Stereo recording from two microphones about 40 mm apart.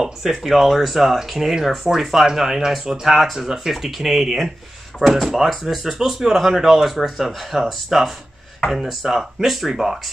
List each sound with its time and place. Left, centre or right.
0.0 s speech: centre